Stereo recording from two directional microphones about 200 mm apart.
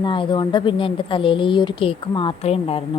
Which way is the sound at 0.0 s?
25° left (ahead or behind).